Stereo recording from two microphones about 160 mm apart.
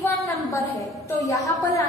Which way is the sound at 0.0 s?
20° left (ahead or behind).